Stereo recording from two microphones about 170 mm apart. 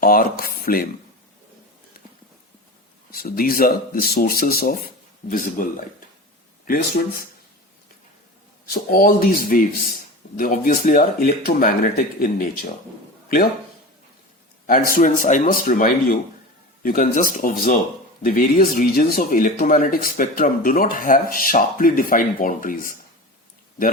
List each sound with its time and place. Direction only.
0.0 s speech: 55° left (ahead or behind)
3.1 s speech: 60° left (ahead or behind)
8.6 s speech: 60° left (ahead or behind)
14.7 s a man's voice: 55° left (ahead or behind)